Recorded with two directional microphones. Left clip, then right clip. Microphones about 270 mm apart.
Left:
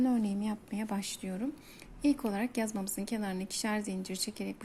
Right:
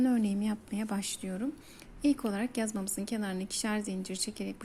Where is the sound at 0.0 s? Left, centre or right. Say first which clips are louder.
Right 2 dB; centre.